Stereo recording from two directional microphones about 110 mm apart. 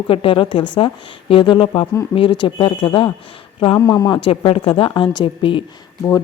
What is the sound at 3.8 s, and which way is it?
Speech, 35° left (ahead or behind).